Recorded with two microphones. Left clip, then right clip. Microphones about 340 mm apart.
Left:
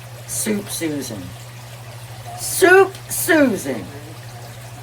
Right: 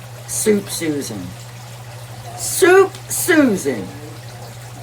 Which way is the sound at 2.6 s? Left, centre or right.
Centre.